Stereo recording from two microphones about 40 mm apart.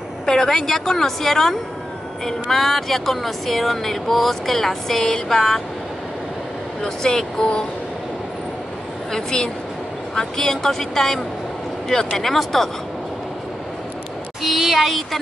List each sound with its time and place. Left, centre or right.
0.3 s speech: centre
6.8 s speech: centre
9.1 s speech: centre
11.9 s speech: centre
12.2 s speech: centre
14.4 s speech: centre